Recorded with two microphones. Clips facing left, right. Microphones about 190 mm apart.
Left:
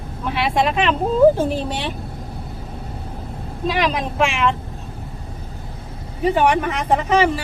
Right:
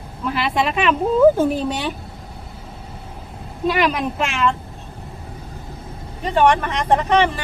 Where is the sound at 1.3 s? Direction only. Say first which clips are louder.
Right 2 dB; 30° left (ahead or behind).